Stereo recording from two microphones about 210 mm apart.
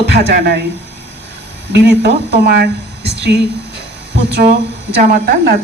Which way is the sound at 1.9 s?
55° right (ahead or behind).